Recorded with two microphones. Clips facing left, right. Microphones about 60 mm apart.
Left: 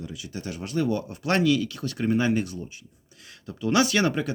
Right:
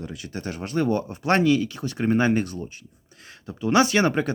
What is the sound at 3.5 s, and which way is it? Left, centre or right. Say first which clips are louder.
Speech: right 3 dB; right.